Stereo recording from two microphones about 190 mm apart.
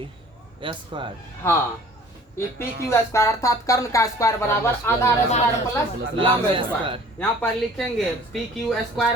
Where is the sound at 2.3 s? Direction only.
15° left (ahead or behind).